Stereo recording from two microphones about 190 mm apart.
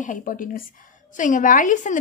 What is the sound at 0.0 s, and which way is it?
A woman's voice, 45° left (ahead or behind).